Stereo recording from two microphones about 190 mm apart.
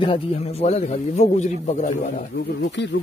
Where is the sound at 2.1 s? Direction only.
65° left (ahead or behind).